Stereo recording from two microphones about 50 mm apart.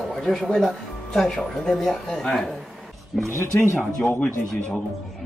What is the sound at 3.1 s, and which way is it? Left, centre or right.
Speech, right.